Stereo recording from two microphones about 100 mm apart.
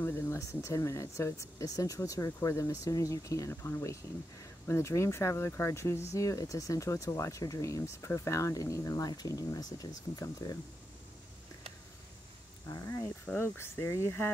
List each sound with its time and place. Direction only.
0.0 s a sound: 20° left (ahead or behind)
0.4 s speech: 30° left (ahead or behind)
12.6 s speech: 30° left (ahead or behind)